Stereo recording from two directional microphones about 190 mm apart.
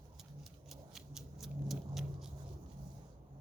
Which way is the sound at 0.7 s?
Centre (ahead or behind).